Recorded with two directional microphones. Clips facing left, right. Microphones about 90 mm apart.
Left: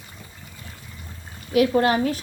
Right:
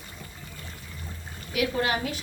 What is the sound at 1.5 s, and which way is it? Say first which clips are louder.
Speech: left 8 dB; 35° left (ahead or behind).